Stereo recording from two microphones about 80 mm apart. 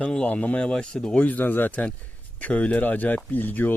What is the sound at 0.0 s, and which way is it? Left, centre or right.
Speech, centre.